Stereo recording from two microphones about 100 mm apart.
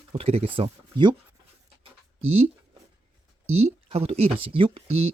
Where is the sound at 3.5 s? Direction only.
90° right; by 5.1 s 75° right (ahead or behind).